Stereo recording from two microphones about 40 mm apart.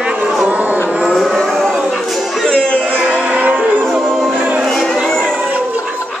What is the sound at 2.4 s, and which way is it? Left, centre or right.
Music, left.